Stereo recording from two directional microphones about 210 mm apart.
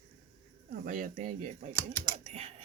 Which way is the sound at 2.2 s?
30° right (ahead or behind).